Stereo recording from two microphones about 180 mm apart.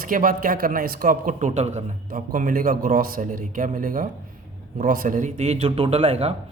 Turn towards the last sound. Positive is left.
turn(degrees=-35)  # may be behind; listen again after turning